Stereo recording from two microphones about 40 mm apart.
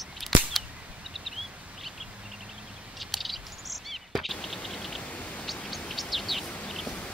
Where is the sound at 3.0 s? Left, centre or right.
Centre.